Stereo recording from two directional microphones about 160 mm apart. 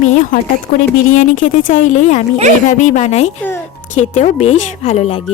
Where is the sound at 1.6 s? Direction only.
55° left (ahead or behind).